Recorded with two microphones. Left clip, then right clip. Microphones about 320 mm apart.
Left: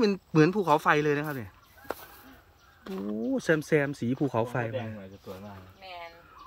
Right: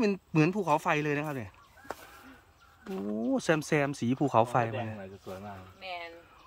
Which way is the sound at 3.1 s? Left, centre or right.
Centre.